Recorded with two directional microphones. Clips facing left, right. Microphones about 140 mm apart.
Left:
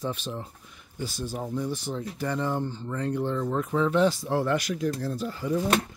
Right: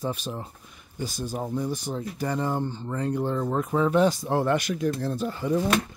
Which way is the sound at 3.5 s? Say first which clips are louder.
Right 2 dB; 15° right (ahead or behind).